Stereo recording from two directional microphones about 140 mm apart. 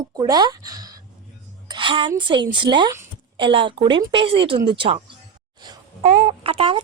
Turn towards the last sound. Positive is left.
turn(degrees=-40)  # may be behind; listen again after turning